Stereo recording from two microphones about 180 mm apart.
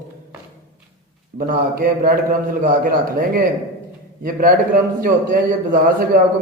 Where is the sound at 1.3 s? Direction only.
50° right (ahead or behind).